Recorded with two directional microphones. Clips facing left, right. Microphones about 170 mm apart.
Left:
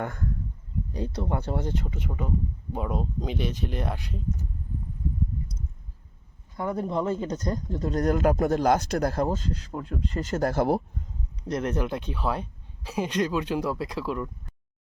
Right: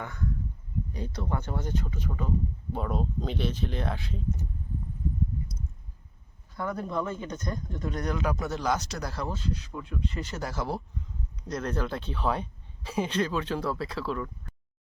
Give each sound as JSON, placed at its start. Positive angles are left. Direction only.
{"t": 0.0, "sound": "speech", "side_deg": 50}
{"t": 0.9, "sound": "speech", "side_deg": 30}
{"t": 2.7, "sound": "speech", "side_deg": 10}
{"t": 6.6, "sound": "speech", "side_deg": 25}
{"t": 11.4, "sound": "speech", "side_deg": 25}